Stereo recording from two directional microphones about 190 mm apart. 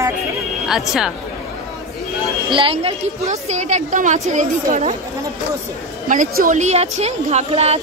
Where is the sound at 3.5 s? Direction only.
40° right (ahead or behind).